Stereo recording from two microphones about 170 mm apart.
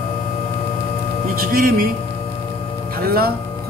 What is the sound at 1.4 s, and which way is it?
Speech, 60° right (ahead or behind).